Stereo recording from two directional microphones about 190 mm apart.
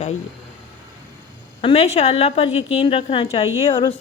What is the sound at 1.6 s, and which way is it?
A woman's voice, 30° left (ahead or behind).